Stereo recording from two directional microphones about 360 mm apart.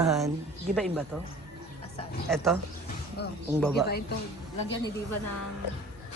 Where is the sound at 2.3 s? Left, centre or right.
Centre.